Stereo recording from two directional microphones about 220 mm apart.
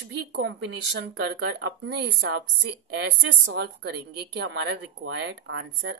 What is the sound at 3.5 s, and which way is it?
A woman's voice, 50° right (ahead or behind).